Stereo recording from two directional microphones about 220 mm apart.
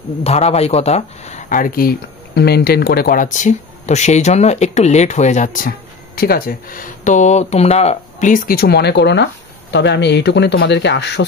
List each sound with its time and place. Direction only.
0.2 s speech: 30° left (ahead or behind); by 11.2 s 50° left (ahead or behind)